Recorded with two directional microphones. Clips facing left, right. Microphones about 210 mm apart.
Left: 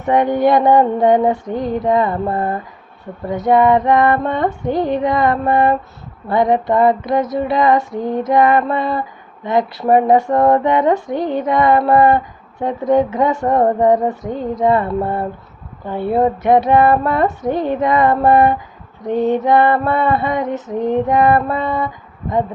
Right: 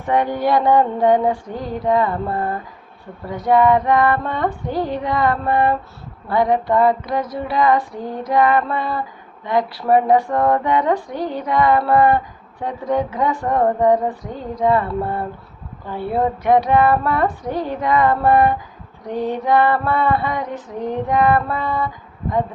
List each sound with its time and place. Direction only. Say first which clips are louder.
0.0 s female singing: left 5 dB; 20° left (ahead or behind)
3.2 s female singing: left 2 dB; 20° left (ahead or behind)